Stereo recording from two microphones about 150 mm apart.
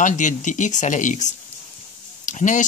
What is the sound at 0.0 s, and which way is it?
Speech, 55° left (ahead or behind).